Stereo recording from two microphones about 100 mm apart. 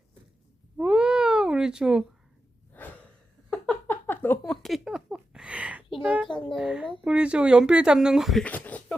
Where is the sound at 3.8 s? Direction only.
20° left (ahead or behind).